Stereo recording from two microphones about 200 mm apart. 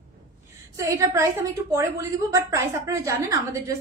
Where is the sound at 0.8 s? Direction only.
15° right (ahead or behind).